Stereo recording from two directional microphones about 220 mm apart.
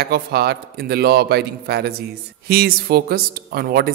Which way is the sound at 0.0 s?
45° right (ahead or behind).